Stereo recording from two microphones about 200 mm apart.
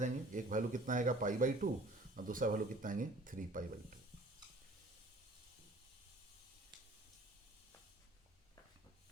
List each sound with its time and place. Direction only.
0.0 s speech: 40° right (ahead or behind)